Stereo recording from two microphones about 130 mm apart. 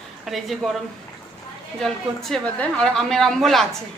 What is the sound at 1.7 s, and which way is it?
A woman's voice, 5° left (ahead or behind).